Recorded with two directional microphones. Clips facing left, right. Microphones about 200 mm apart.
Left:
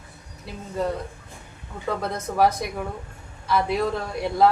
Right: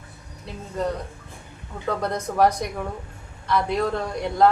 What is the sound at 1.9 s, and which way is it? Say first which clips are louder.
A woman's voice: right 2 dB; centre (ahead or behind).